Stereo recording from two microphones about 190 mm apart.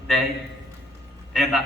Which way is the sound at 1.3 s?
Centre (ahead or behind).